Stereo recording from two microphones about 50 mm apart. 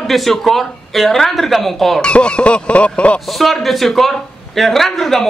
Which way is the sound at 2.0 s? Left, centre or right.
Left.